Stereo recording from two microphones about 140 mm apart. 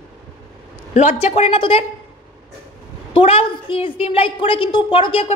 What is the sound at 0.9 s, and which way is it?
Speech, 50° left (ahead or behind).